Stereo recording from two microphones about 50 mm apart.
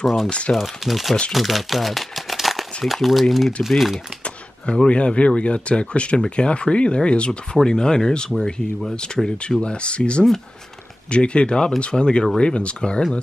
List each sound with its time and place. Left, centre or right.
0.0 s speech: centre
4.8 s speech: left